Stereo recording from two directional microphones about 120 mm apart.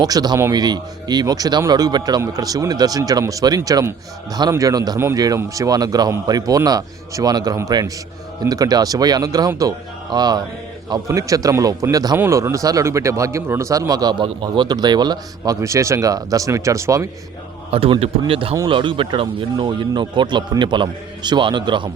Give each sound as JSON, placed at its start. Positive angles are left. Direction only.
{"t": 0.0, "sound": "speech", "side_deg": -35}
{"t": 4.9, "sound": "speech", "side_deg": -20}
{"t": 17.7, "sound": "a man's voice", "side_deg": -50}